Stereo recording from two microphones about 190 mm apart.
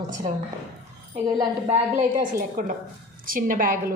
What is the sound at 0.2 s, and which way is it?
A woman's voice, 35° right (ahead or behind).